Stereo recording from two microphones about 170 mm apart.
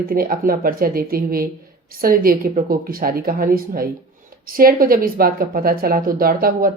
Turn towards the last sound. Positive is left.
turn(degrees=-60)  # may be behind; listen again after turning